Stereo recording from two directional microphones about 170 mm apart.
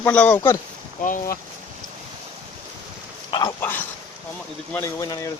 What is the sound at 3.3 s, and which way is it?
Speech, 25° left (ahead or behind).